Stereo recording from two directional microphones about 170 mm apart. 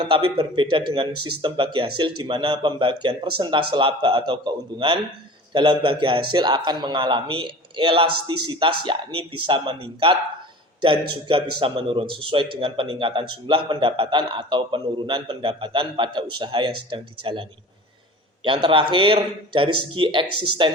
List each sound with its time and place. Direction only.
0.0 s a man's voice: 30° right (ahead or behind)
18.4 s a man's voice: 30° right (ahead or behind)